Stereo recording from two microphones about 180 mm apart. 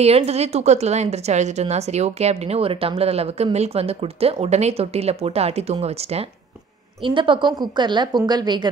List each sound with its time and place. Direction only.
0.0 s a woman's voice: 35° right (ahead or behind)